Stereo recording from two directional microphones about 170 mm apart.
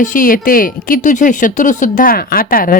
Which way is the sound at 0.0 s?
50° left (ahead or behind).